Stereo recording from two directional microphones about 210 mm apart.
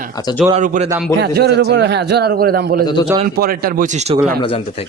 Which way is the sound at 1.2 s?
50° right (ahead or behind).